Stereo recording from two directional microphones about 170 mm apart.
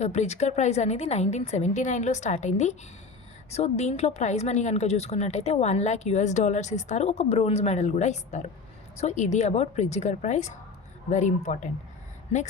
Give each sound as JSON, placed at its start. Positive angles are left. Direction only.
{"t": 0.0, "sound": "a woman's voice", "side_deg": 40}